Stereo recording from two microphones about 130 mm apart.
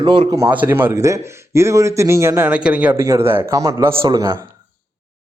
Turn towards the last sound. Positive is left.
turn(degrees=-30)  # may be behind; listen again after turning